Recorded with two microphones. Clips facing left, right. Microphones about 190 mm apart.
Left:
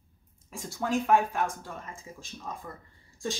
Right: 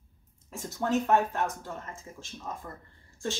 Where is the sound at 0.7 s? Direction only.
10° left (ahead or behind).